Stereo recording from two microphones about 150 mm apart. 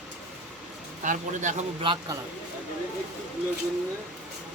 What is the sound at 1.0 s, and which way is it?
Speech, 60° right (ahead or behind).